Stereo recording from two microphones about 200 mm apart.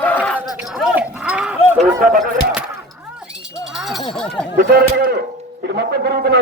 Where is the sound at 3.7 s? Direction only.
Centre (ahead or behind).